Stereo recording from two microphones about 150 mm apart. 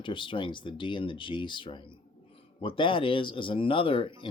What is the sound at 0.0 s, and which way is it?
Speech, 35° left (ahead or behind).